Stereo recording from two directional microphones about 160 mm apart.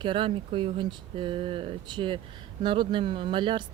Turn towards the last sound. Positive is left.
turn(degrees=-30)  # may be behind; listen again after turning